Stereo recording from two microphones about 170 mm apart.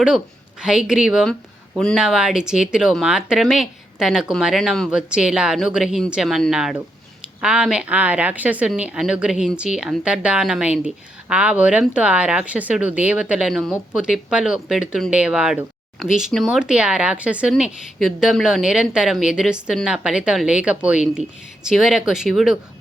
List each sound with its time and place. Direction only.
0.6 s speech: 5° right (ahead or behind)